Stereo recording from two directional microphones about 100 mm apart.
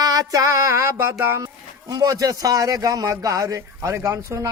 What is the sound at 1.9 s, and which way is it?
A man's voice, 35° right (ahead or behind).